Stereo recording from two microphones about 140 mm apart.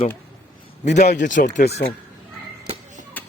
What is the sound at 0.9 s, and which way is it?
Speech, 60° left (ahead or behind).